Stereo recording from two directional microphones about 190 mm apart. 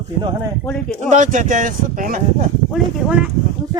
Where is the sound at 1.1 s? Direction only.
40° right (ahead or behind).